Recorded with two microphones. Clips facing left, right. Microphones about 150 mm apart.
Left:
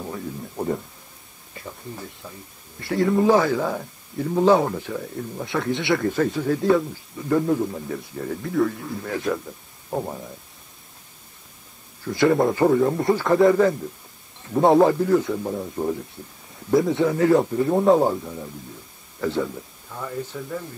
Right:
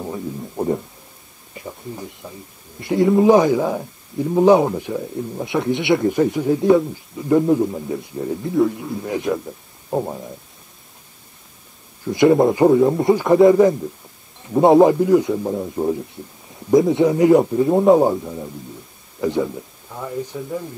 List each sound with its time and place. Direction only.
0.0 s speech: 20° right (ahead or behind)
1.5 s a sound: 15° right (ahead or behind)
2.8 s a man's voice: 20° right (ahead or behind)
12.0 s a man's voice: 20° right (ahead or behind)